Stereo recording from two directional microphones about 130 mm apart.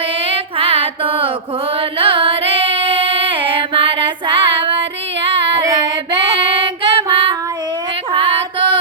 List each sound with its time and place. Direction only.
0.3 s music: 45° right (ahead or behind)
5.2 s female singing: 45° right (ahead or behind)
5.6 s child singing: 25° right (ahead or behind)
6.6 s child singing: 45° right (ahead or behind)
8.1 s female singing: 40° right (ahead or behind)